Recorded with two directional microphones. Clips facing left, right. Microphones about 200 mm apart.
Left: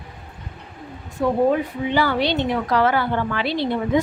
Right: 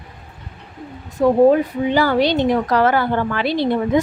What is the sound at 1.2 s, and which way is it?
Speech, 40° right (ahead or behind).